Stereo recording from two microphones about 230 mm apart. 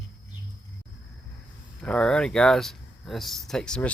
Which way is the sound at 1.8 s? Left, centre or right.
Centre.